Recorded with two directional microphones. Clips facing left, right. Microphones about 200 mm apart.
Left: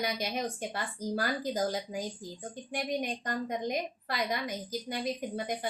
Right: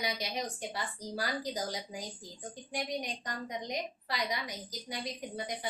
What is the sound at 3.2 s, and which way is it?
A woman's voice, 50° left (ahead or behind).